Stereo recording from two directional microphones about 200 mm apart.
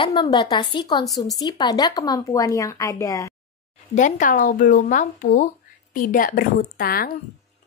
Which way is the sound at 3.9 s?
40° left (ahead or behind).